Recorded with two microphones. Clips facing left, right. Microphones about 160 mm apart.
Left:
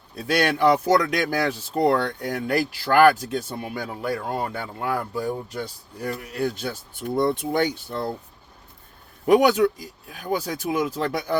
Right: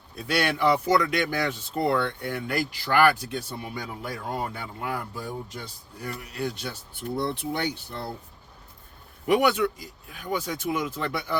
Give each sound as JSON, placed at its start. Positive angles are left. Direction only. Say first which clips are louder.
{"t": 0.4, "sound": "speech", "louder": "left 4 dB", "side_deg": 40}
{"t": 9.2, "sound": "a man's voice", "louder": "left 5 dB", "side_deg": 40}